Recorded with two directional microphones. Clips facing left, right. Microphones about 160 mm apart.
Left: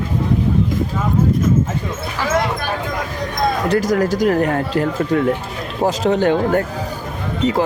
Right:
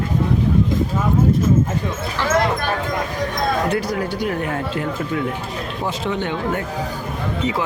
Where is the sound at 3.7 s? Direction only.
45° left (ahead or behind).